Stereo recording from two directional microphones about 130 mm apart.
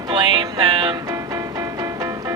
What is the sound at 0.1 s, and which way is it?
Music, 35° right (ahead or behind).